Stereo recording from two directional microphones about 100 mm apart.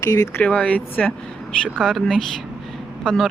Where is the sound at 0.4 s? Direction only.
15° left (ahead or behind).